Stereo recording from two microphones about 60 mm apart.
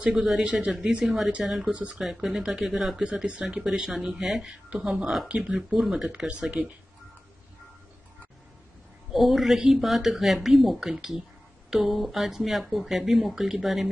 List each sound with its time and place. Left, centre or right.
0.0 s speech: centre
1.7 s speech: right
2.0 s speech: centre
9.1 s speech: centre